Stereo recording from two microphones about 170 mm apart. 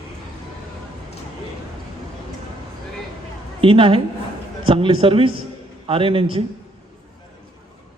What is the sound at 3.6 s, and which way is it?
A woman's voice, 30° right (ahead or behind).